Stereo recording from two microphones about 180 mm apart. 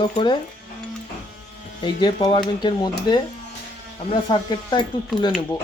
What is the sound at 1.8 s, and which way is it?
Speech, 25° left (ahead or behind).